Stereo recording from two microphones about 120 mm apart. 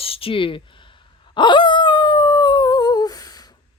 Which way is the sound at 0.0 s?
50° left (ahead or behind).